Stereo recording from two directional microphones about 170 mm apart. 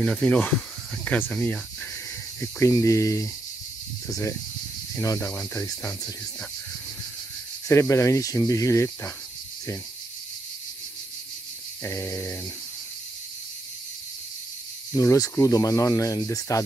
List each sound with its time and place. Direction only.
0.0 s speech: 5° left (ahead or behind)
2.6 s speech: 20° left (ahead or behind)
7.6 s speech: 15° left (ahead or behind)
11.8 s speech: 15° left (ahead or behind)
15.0 s speech: 20° left (ahead or behind)